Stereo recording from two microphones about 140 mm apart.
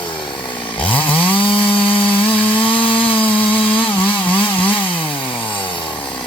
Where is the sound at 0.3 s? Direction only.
10° left (ahead or behind).